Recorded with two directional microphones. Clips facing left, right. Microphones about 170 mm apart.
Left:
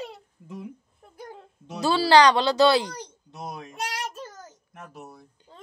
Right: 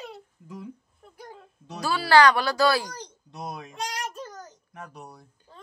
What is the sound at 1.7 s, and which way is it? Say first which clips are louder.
Speech: left 2 dB; 25° left (ahead or behind).